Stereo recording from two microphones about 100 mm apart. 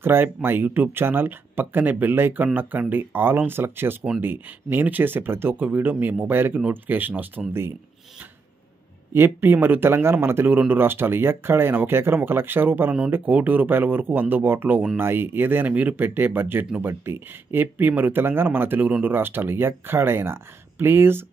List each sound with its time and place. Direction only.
0.0 s speech: 20° right (ahead or behind)
9.1 s speech: 25° right (ahead or behind)